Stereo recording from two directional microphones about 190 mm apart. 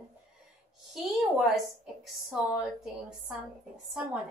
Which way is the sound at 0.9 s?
Centre (ahead or behind).